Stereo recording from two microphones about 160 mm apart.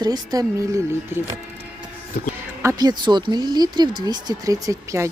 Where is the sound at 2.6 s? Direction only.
20° right (ahead or behind).